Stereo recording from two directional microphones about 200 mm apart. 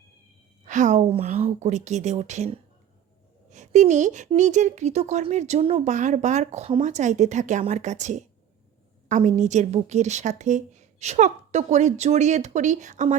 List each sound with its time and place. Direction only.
0.6 s speech: 40° right (ahead or behind)